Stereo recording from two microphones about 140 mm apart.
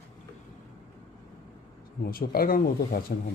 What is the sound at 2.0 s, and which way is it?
Speech, 90° left.